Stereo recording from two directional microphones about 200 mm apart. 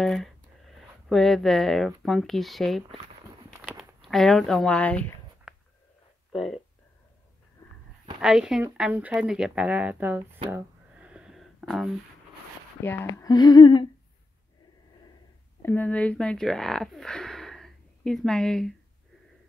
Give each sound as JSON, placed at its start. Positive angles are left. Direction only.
{"t": 0.0, "sound": "speech", "side_deg": 0}
{"t": 3.6, "sound": "a sound", "side_deg": 0}
{"t": 6.3, "sound": "speech", "side_deg": 0}
{"t": 8.2, "sound": "speech", "side_deg": -5}
{"t": 10.5, "sound": "a sound", "side_deg": -5}
{"t": 12.8, "sound": "female singing", "side_deg": 15}
{"t": 15.6, "sound": "speech", "side_deg": 10}